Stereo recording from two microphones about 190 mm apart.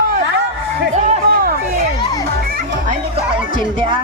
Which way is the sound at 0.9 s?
40° right (ahead or behind).